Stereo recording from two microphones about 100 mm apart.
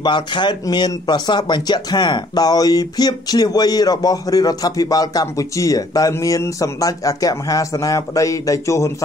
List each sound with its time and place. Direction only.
0.0 s speech: 50° left (ahead or behind); by 8.9 s 30° left (ahead or behind)